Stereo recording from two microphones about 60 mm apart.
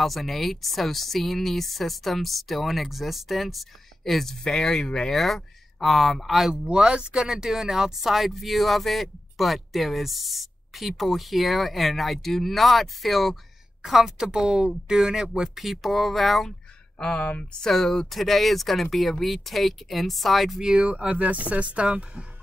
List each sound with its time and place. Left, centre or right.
0.0 s speech: centre
6.7 s speech: centre
17.2 s speech: left
17.6 s speech: centre
20.7 s speech: centre